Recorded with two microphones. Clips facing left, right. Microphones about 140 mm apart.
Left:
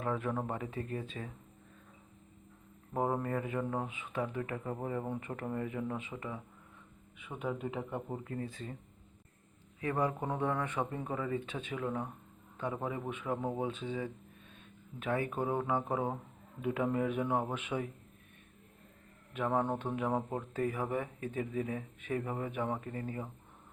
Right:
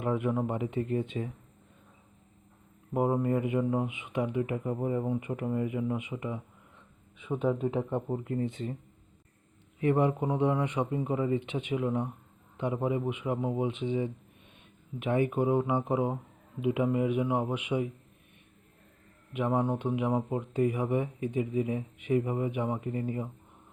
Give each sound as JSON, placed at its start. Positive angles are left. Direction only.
{"t": 0.0, "sound": "speech", "side_deg": -15}
{"t": 2.9, "sound": "speech", "side_deg": -15}
{"t": 7.3, "sound": "speech", "side_deg": -30}
{"t": 9.8, "sound": "speech", "side_deg": -25}
{"t": 19.3, "sound": "speech", "side_deg": -15}